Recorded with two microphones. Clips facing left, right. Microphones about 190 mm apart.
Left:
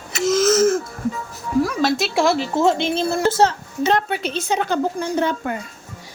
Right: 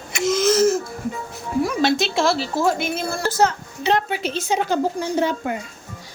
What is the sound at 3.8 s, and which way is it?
Speech, 50° left (ahead or behind).